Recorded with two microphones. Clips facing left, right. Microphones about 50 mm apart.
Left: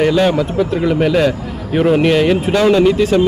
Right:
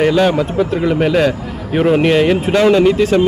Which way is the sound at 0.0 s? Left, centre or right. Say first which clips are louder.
Even; centre.